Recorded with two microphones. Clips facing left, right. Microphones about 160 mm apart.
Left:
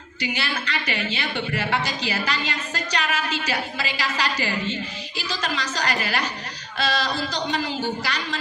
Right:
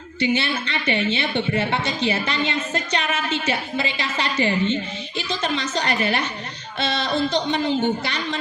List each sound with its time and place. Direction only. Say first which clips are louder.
0.2 s a woman's voice: right 6 dB; 25° right (ahead or behind)